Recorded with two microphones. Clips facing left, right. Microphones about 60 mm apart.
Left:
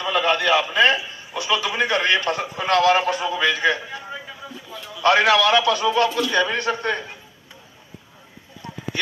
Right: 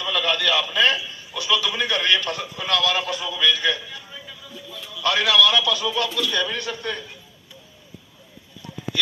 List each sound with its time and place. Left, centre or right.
0.0 s a man's voice: left